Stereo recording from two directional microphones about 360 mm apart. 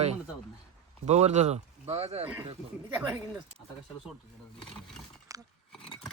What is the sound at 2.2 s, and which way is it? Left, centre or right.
Speech, centre.